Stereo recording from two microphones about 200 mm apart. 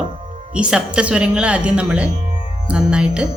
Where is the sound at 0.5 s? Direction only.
5° right (ahead or behind).